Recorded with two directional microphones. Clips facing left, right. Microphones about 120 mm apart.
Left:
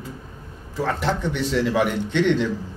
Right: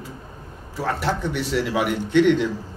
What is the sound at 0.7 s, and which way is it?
A man's voice, 10° right (ahead or behind).